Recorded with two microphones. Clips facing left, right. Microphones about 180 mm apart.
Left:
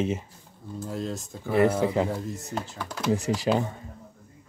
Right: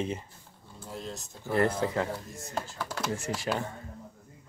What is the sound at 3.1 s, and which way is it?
Speech, 15° left (ahead or behind).